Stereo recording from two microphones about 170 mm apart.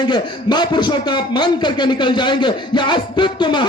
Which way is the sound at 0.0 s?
25° left (ahead or behind).